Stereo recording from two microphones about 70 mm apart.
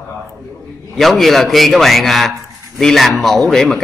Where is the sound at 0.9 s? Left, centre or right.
Centre.